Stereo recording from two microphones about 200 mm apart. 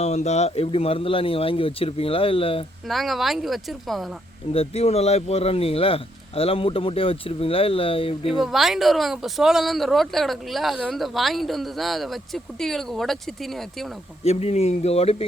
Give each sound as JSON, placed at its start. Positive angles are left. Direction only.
{"t": 0.0, "sound": "speech", "side_deg": 35}
{"t": 2.8, "sound": "speech", "side_deg": 0}
{"t": 4.5, "sound": "speech", "side_deg": 30}
{"t": 8.4, "sound": "speech", "side_deg": 0}
{"t": 14.3, "sound": "speech", "side_deg": 30}